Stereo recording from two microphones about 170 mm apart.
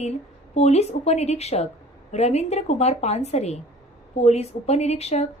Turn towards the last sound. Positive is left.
turn(degrees=40)  # may be behind; listen again after turning